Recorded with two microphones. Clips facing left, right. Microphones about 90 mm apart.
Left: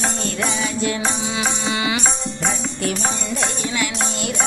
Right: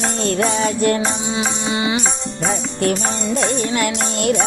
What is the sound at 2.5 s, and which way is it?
Music, 50° right (ahead or behind).